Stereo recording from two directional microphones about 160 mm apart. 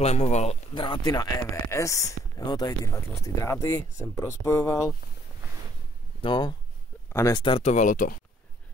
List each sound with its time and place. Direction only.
0.0 s a man's voice: 45° left (ahead or behind)
0.7 s speech: 30° left (ahead or behind)
6.2 s speech: 30° left (ahead or behind)
7.1 s speech: 20° left (ahead or behind)
7.6 s speech: 50° left (ahead or behind)